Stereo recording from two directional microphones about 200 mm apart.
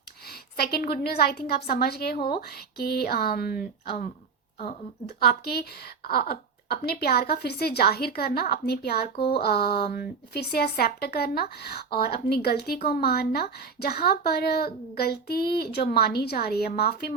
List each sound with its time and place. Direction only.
0.3 s a woman's voice: 50° left (ahead or behind)